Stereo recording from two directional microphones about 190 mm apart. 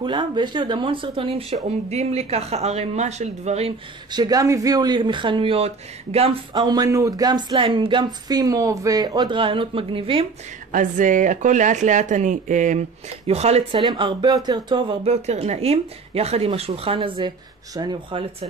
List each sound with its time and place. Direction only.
0.0 s speech: 25° right (ahead or behind)
4.1 s speech: 20° right (ahead or behind)
10.7 s speech: 45° right (ahead or behind); by 18.5 s 25° right (ahead or behind)